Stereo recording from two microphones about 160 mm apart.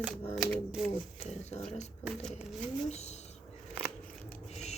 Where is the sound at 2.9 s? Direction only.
45° left (ahead or behind).